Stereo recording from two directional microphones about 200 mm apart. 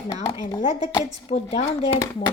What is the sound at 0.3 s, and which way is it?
Speech, 15° left (ahead or behind).